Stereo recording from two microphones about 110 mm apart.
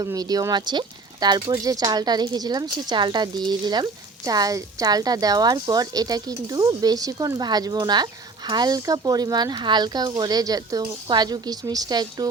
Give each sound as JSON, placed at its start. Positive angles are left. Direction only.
{"t": 0.0, "sound": "speech", "side_deg": -35}